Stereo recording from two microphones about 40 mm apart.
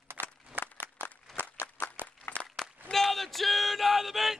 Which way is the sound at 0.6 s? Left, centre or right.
Right.